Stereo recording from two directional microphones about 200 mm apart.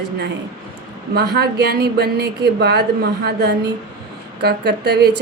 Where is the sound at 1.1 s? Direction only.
55° right (ahead or behind).